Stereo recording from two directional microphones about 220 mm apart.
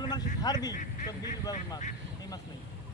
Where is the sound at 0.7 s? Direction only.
35° left (ahead or behind).